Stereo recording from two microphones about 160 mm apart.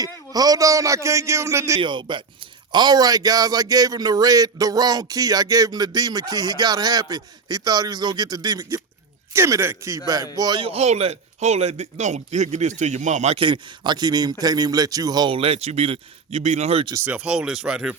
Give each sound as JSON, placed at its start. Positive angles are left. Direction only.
{"t": 0.0, "sound": "a man's voice", "side_deg": -25}
{"t": 1.8, "sound": "a man's voice", "side_deg": -30}
{"t": 13.3, "sound": "a man's voice", "side_deg": -30}
{"t": 17.1, "sound": "speech", "side_deg": -5}